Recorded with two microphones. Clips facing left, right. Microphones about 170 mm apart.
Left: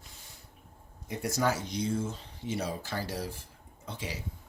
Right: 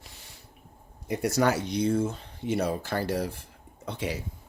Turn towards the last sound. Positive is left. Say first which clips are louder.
# right 7 dB
turn(degrees=-65)  # may be behind; listen again after turning